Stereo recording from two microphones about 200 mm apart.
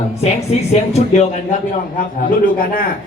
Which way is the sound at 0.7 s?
35° left (ahead or behind).